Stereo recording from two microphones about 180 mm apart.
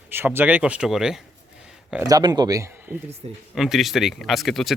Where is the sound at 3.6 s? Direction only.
Centre (ahead or behind).